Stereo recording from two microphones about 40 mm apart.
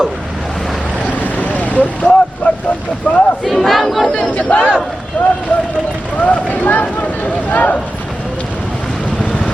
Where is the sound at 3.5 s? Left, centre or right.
Centre.